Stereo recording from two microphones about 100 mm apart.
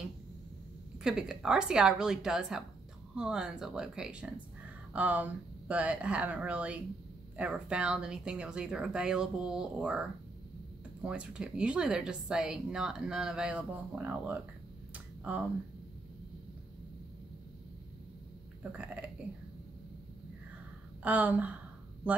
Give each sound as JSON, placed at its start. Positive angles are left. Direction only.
{"t": 1.0, "sound": "speech", "side_deg": -5}
{"t": 18.6, "sound": "speech", "side_deg": -15}
{"t": 21.0, "sound": "speech", "side_deg": -15}